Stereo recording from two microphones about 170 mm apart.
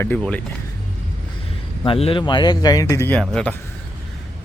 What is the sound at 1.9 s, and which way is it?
Speech, 35° left (ahead or behind).